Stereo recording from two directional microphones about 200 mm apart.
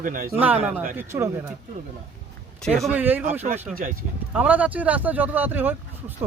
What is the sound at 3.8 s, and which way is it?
Speech, 40° right (ahead or behind).